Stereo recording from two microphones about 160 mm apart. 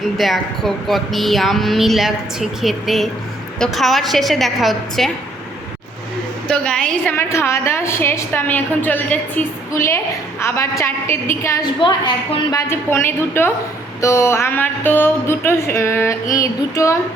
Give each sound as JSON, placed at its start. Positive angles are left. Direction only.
{"t": 0.2, "sound": "speech", "side_deg": 0}
{"t": 6.5, "sound": "a woman's voice", "side_deg": 5}
{"t": 11.8, "sound": "a woman's voice", "side_deg": 30}
{"t": 16.3, "sound": "female singing", "side_deg": 20}